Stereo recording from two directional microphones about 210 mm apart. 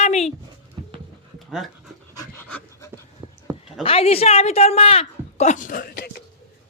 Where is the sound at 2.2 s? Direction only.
10° left (ahead or behind).